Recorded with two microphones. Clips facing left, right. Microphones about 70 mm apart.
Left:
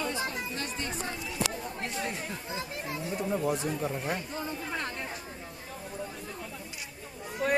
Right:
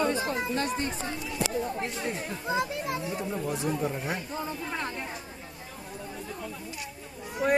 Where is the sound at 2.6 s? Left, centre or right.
Right.